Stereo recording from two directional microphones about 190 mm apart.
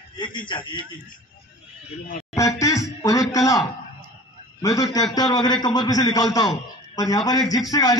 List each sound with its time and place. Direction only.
0.2 s a man's voice: 25° left (ahead or behind)
2.3 s music: 15° left (ahead or behind)
4.6 s a man's voice: 20° left (ahead or behind)